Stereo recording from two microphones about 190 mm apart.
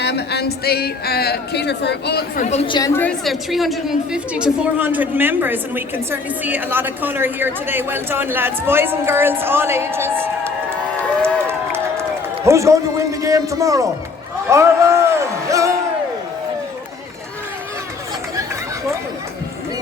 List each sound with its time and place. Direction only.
0.0 s speech: 60° left (ahead or behind); by 2.9 s 25° left (ahead or behind)
2.9 s a woman's voice: 5° left (ahead or behind); by 10.5 s 10° right (ahead or behind)
11.2 s run: 15° right (ahead or behind)
12.5 s a woman's voice: 15° right (ahead or behind)